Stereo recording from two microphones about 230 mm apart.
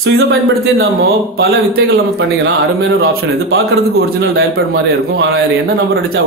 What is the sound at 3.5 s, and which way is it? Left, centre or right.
Speech, right.